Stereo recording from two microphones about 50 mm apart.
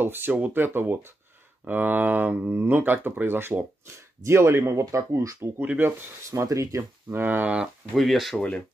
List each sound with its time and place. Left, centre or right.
0.0 s speech: right
1.6 s speech: right
4.2 s speech: right
5.4 s speech: right
6.3 s speech: right
7.1 s speech: right
7.9 s speech: centre
8.4 s speech: left